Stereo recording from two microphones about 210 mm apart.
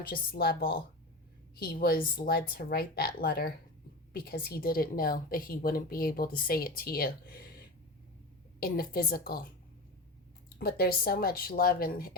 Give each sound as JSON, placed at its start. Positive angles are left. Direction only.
{"t": 0.1, "sound": "a woman's voice", "side_deg": 45}
{"t": 8.6, "sound": "a woman's voice", "side_deg": 45}
{"t": 10.6, "sound": "a woman's voice", "side_deg": 50}